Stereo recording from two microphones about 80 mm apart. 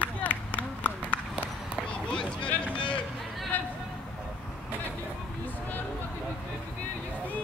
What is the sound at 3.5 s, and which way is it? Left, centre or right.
Vehicle, left.